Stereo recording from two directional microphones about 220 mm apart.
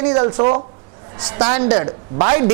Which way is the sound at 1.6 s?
20° right (ahead or behind).